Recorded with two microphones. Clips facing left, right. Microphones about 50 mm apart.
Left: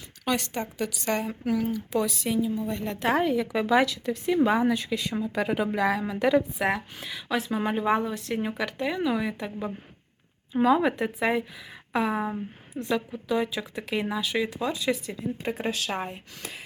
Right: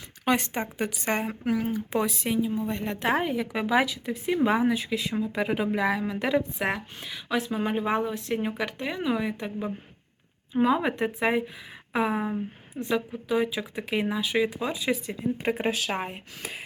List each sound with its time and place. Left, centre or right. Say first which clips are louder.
0.3 s speech: right 2 dB; centre
12.2 s speech: right 1 dB; centre